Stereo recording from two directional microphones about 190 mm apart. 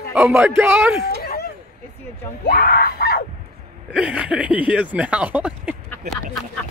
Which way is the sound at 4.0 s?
5° right (ahead or behind).